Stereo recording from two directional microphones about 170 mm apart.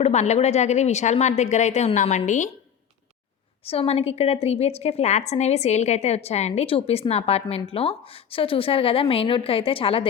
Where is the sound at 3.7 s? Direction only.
35° left (ahead or behind).